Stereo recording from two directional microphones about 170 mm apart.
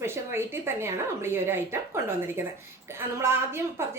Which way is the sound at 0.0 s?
15° right (ahead or behind).